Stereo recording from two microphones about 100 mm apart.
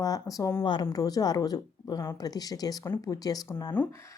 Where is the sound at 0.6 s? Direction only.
50° left (ahead or behind).